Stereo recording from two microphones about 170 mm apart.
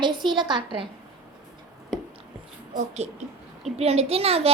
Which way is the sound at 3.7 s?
35° right (ahead or behind).